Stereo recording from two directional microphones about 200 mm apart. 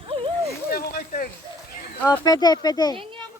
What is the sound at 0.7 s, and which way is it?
Speech, 50° left (ahead or behind).